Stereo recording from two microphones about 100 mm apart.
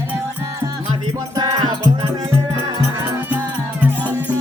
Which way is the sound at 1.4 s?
45° right (ahead or behind).